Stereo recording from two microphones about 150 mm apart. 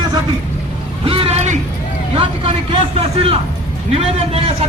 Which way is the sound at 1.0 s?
35° right (ahead or behind).